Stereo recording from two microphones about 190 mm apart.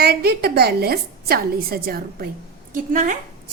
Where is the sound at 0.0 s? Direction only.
55° right (ahead or behind).